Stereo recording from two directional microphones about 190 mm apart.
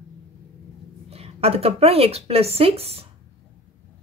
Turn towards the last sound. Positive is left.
turn(degrees=-30)  # may be behind; listen again after turning